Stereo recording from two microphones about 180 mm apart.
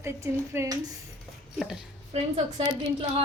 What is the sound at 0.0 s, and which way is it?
Speech, 15° right (ahead or behind).